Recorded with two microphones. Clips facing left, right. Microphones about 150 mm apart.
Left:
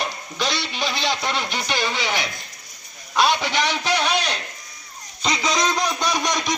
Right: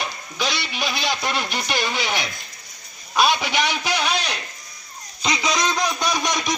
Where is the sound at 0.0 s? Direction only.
Centre (ahead or behind).